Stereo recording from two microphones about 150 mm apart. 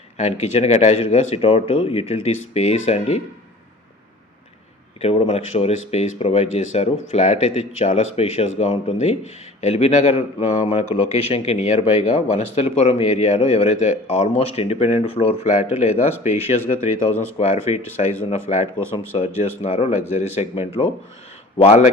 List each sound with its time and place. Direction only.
0.2 s a man's voice: 45° left (ahead or behind)
4.9 s a man's voice: 45° left (ahead or behind)